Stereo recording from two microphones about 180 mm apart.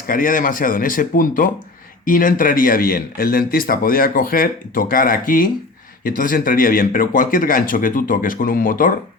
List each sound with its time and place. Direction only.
0.1 s speech: 50° left (ahead or behind)